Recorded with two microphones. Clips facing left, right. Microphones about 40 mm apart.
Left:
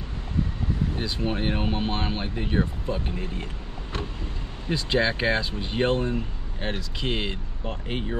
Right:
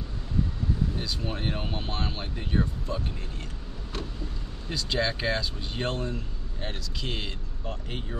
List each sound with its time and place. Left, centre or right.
0.9 s speech: left
4.6 s speech: left